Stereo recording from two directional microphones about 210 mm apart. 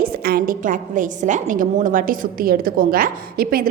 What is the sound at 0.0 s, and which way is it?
A woman's voice, 45° right (ahead or behind).